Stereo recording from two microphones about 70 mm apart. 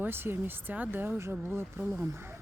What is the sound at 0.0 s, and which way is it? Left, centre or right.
Speech, right.